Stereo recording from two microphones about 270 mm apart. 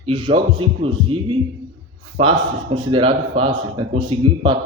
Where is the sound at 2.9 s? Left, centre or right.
Centre.